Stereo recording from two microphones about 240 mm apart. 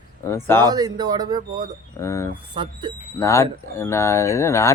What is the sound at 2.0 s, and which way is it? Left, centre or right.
Speech, centre.